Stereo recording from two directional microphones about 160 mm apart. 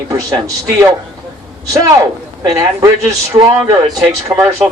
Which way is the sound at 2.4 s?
25° right (ahead or behind).